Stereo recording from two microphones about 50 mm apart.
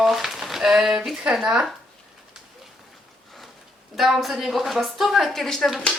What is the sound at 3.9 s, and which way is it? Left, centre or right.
A woman's voice, centre.